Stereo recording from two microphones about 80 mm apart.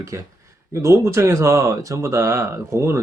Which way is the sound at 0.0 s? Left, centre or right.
Right.